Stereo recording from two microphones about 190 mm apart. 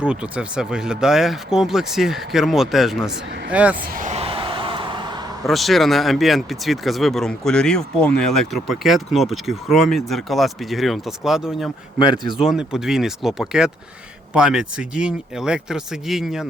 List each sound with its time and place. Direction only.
0.0 s speech: 5° right (ahead or behind)
3.8 s a sound: 45° right (ahead or behind); by 5.3 s 25° right (ahead or behind)
5.5 s speech: centre (ahead or behind)